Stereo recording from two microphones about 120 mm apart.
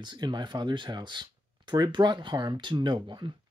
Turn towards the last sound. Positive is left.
turn(degrees=-35)  # may be behind; listen again after turning